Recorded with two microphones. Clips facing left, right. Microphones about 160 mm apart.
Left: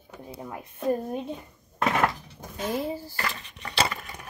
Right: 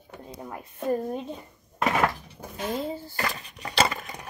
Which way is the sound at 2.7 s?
10° left (ahead or behind).